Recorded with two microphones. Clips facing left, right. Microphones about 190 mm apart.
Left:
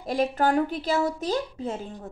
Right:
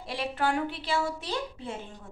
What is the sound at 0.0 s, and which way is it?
A woman's voice, 45° left (ahead or behind).